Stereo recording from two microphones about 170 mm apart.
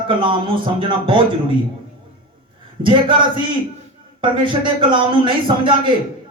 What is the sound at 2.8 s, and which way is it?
Speech, 30° right (ahead or behind).